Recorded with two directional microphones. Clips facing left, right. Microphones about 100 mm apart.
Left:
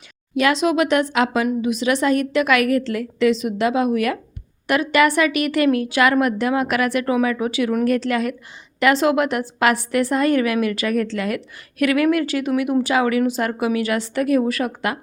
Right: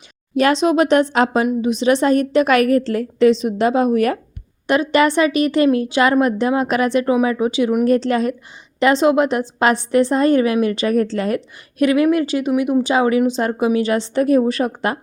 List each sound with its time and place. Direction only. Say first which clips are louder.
0.3 s a woman's voice: right 3 dB; 35° right (ahead or behind)
7.9 s a woman's voice: right 4 dB; 30° right (ahead or behind)